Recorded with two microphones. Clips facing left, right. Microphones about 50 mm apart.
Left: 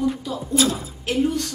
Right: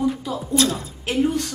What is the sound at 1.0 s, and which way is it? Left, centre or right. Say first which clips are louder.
Speech: right 1 dB; centre.